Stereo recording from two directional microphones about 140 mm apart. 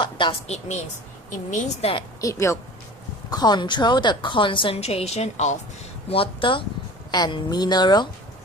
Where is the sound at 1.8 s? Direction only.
40° left (ahead or behind).